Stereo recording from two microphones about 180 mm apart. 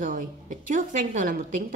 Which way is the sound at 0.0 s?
50° right (ahead or behind).